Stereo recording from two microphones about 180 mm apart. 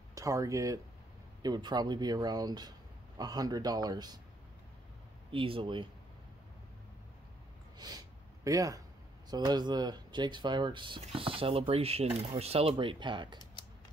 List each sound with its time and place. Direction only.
0.1 s speech: 15° right (ahead or behind)
5.3 s speech: 30° right (ahead or behind)
8.5 s speech: 20° right (ahead or behind)